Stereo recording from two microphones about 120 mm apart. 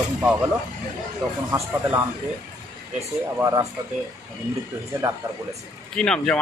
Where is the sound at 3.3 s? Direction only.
25° right (ahead or behind).